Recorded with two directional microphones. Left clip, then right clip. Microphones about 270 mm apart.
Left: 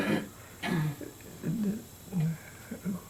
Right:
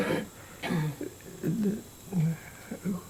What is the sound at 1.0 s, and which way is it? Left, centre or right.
Speech, right.